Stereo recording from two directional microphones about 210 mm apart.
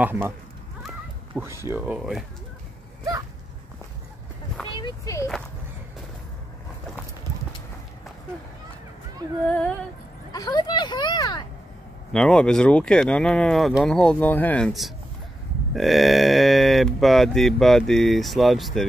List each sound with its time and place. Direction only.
0.0 s speech: 10° right (ahead or behind)
1.3 s speech: 10° right (ahead or behind)
4.6 s speech: 20° left (ahead or behind)
10.3 s speech: 20° left (ahead or behind)
12.1 s speech: 5° left (ahead or behind)